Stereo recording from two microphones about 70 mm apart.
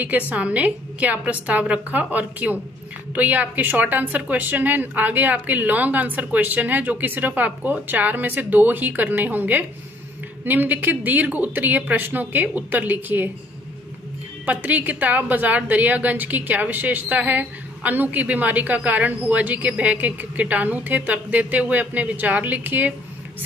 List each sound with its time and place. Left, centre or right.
0.3 s a woman's voice: right
14.4 s a woman's voice: right